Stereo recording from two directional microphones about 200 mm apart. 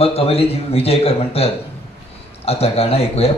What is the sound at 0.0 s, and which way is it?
A man's voice, 30° left (ahead or behind).